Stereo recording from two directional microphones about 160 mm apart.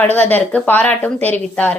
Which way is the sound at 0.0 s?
10° left (ahead or behind).